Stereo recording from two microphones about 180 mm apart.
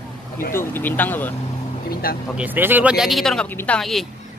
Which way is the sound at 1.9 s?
55° left (ahead or behind).